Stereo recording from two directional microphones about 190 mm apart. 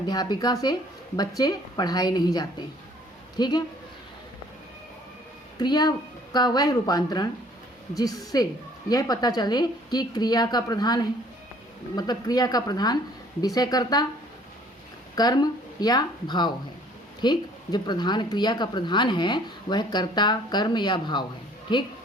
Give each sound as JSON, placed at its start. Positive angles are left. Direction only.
{"t": 0.0, "sound": "speech", "side_deg": 20}
{"t": 5.5, "sound": "speech", "side_deg": 20}
{"t": 15.1, "sound": "speech", "side_deg": 20}